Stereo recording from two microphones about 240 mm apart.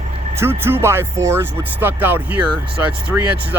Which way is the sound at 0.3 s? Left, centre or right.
Centre.